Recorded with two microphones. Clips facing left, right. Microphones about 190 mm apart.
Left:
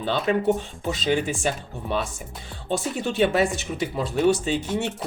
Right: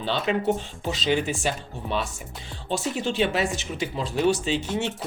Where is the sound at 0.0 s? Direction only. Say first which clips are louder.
Left 2 dB; 50° left (ahead or behind).